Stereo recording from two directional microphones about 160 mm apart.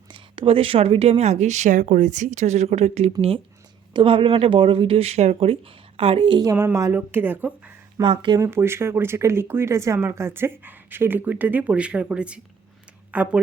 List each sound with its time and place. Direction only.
0.1 s a woman's voice: 35° right (ahead or behind); by 7.5 s 10° right (ahead or behind)
8.0 s speech: 30° right (ahead or behind)
8.4 s speech: 15° right (ahead or behind)